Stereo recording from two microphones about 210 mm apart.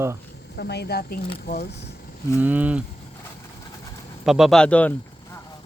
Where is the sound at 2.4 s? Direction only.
10° right (ahead or behind).